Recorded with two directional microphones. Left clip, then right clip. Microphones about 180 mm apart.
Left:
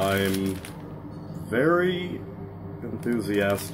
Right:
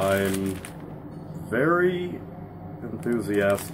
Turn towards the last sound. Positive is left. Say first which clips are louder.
# right 2 dB
turn(degrees=-10)  # may be behind; listen again after turning